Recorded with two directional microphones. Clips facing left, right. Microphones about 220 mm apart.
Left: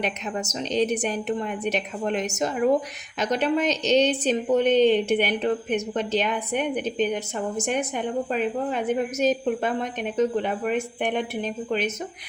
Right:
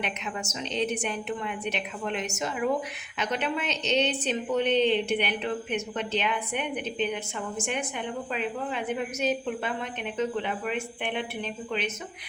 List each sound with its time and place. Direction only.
0.0 s a woman's voice: 40° left (ahead or behind)